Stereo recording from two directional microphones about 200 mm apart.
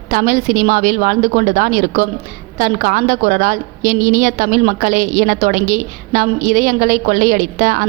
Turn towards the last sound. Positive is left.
turn(degrees=-40)  # may be behind; listen again after turning